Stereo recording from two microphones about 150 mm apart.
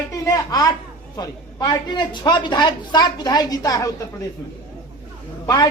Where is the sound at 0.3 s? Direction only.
25° left (ahead or behind).